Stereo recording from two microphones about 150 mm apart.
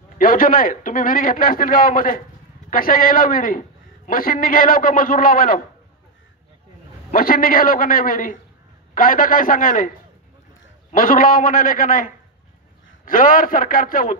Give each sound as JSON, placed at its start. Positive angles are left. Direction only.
{"t": 0.2, "sound": "a man's voice", "side_deg": 70}
{"t": 7.1, "sound": "a man's voice", "side_deg": 75}